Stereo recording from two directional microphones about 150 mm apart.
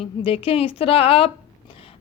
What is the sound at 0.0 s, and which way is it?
A woman's voice, 35° left (ahead or behind).